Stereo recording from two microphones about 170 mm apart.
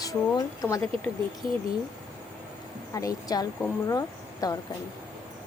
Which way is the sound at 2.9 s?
20° left (ahead or behind).